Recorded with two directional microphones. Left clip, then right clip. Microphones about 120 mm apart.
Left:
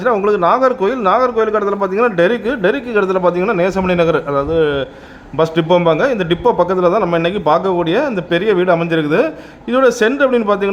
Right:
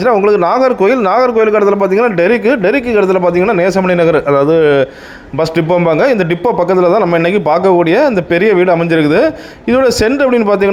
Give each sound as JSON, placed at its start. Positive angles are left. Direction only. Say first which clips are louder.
{"t": 0.0, "sound": "a man's voice", "louder": "right 4 dB", "side_deg": -30}
{"t": 4.3, "sound": "speech", "louder": "right 6 dB", "side_deg": -40}